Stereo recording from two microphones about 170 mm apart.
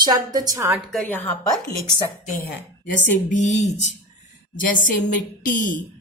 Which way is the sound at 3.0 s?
45° left (ahead or behind).